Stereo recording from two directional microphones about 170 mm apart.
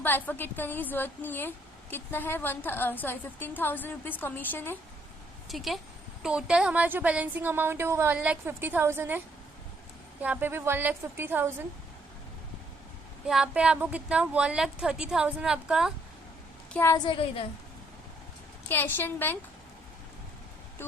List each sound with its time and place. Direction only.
0.0 s speech: 10° left (ahead or behind)
5.5 s a woman's voice: centre (ahead or behind)
10.2 s speech: 10° right (ahead or behind)
13.2 s a woman's voice: 5° right (ahead or behind)
16.7 s speech: 15° left (ahead or behind)
17.1 s a woman's voice: 30° left (ahead or behind)
18.7 s speech: 10° left (ahead or behind)